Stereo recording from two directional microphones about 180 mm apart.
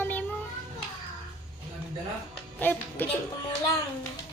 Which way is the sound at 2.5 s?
10° left (ahead or behind).